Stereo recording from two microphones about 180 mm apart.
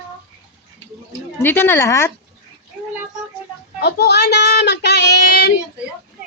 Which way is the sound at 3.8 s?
65° left (ahead or behind).